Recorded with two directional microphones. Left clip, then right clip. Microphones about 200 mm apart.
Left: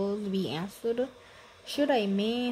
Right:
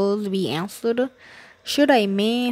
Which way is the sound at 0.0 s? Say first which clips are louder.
Right 9 dB; 40° right (ahead or behind).